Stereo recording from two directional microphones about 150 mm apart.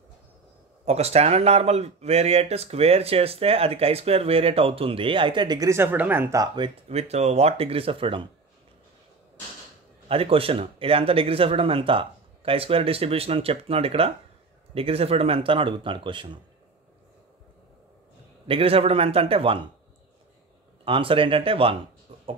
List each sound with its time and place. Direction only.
0.8 s speech: 45° right (ahead or behind); by 6.7 s 25° right (ahead or behind)
6.9 s speech: 45° right (ahead or behind)
10.0 s speech: 40° right (ahead or behind)
18.5 s speech: 40° right (ahead or behind)
20.8 s speech: 35° right (ahead or behind)